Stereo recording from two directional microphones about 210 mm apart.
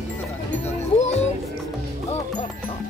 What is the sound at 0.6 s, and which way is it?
Music, 30° left (ahead or behind).